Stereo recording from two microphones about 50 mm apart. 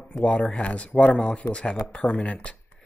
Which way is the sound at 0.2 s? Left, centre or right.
Left.